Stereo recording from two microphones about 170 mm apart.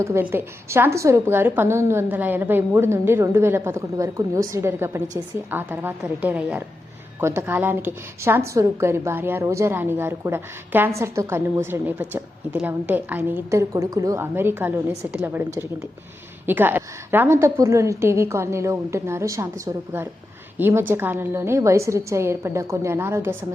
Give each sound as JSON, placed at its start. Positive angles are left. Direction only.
{"t": 0.0, "sound": "a woman's voice", "side_deg": -15}
{"t": 16.5, "sound": "a woman's voice", "side_deg": -10}